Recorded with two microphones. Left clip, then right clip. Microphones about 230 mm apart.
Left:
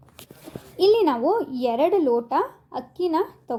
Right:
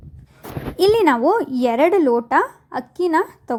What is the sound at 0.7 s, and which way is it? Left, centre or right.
Speech, right.